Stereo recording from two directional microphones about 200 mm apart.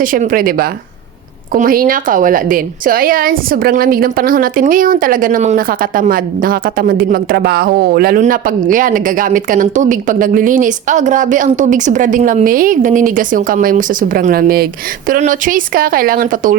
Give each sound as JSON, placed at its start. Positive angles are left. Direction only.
{"t": 0.0, "sound": "a woman's voice", "side_deg": -45}